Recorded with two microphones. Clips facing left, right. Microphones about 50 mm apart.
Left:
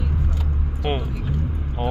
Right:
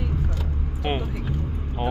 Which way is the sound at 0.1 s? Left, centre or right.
Centre.